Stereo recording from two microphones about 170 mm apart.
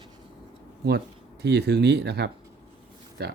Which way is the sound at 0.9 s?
70° right (ahead or behind).